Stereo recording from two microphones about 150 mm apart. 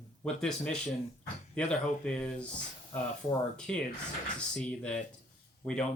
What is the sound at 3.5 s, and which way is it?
Speech, 5° left (ahead or behind).